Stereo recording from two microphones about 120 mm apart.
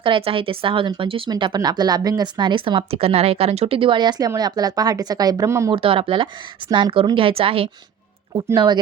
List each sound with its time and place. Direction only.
0.0 s speech: 50° right (ahead or behind)
1.3 s a woman's voice: 40° right (ahead or behind)
5.7 s speech: 50° right (ahead or behind)
6.7 s a woman's voice: 35° right (ahead or behind)
6.9 s speech: 50° right (ahead or behind)
8.5 s a woman's voice: 40° right (ahead or behind)